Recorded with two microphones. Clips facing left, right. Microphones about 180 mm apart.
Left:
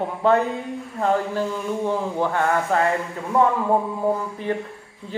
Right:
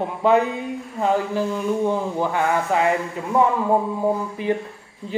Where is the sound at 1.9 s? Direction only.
5° right (ahead or behind).